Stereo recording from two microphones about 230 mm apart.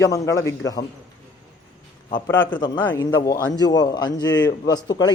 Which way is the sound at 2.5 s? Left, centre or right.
Centre.